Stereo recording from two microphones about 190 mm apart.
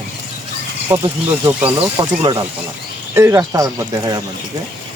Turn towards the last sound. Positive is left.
turn(degrees=-20)  # may be behind; listen again after turning